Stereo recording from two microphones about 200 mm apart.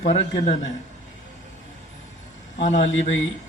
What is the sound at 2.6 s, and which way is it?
Speech, 35° left (ahead or behind).